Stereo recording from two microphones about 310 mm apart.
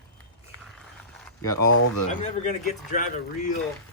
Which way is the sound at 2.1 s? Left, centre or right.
Left.